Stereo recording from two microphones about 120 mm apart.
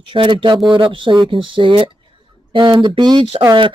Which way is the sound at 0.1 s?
45° right (ahead or behind).